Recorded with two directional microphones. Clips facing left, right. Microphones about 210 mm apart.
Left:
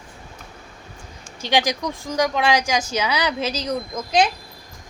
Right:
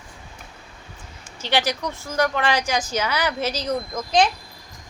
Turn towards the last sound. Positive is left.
turn(degrees=10)  # may be behind; listen again after turning